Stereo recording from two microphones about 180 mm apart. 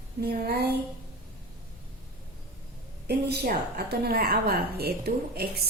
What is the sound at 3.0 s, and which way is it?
A woman's voice, 65° right (ahead or behind).